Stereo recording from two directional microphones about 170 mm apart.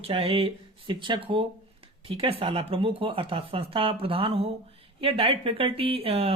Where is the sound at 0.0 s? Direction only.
35° right (ahead or behind).